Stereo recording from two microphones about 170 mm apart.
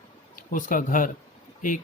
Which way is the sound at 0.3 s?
50° left (ahead or behind).